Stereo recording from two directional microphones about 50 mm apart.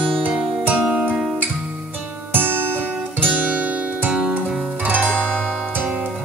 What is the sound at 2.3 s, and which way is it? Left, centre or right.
Music, right.